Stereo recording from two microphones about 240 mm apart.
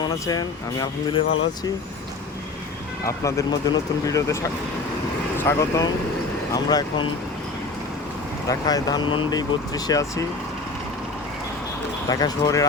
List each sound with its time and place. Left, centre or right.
0.3 s speech: centre
3.1 s speech: centre
8.4 s speech: centre
12.0 s speech: centre